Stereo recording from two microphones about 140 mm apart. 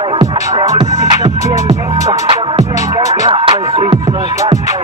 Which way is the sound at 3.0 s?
30° right (ahead or behind).